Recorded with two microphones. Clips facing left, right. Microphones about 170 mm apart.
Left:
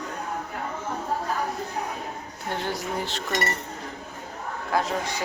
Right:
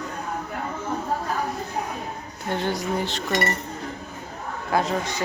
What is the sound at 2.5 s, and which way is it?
Speech, 5° left (ahead or behind).